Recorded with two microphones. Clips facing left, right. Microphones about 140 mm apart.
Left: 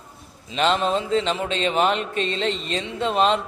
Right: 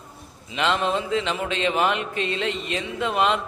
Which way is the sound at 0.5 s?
30° left (ahead or behind).